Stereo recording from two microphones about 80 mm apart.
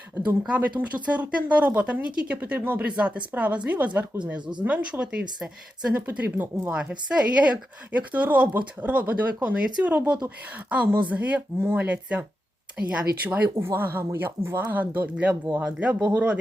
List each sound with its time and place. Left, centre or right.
0.8 s a woman's voice: centre
5.9 s a woman's voice: right
13.6 s a woman's voice: right